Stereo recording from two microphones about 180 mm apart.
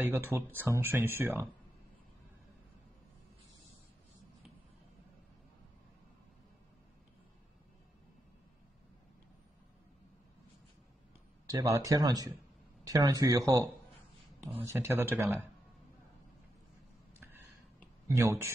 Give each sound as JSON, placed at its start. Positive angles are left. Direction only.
{"t": 0.0, "sound": "speech", "side_deg": -10}
{"t": 11.4, "sound": "a man's voice", "side_deg": -20}
{"t": 14.7, "sound": "speech", "side_deg": -15}
{"t": 18.0, "sound": "speech", "side_deg": -15}